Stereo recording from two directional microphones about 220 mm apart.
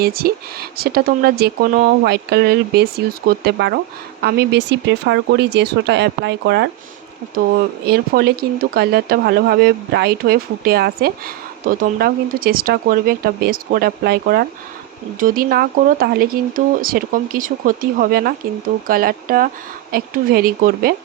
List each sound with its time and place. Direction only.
0.0 s speech: 45° right (ahead or behind)
7.9 s speech: 45° right (ahead or behind)